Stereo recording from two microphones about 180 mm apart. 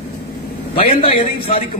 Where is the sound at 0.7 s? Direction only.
30° left (ahead or behind).